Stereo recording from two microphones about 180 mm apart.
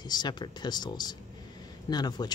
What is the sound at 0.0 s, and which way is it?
Speech, 25° left (ahead or behind).